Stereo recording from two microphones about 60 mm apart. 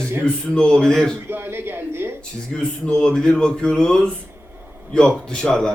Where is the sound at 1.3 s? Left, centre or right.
Right.